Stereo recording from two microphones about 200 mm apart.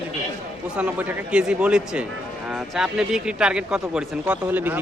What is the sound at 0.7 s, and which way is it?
A man's voice, 5° right (ahead or behind).